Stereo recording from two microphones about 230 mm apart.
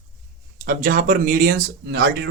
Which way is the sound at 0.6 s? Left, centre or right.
Right.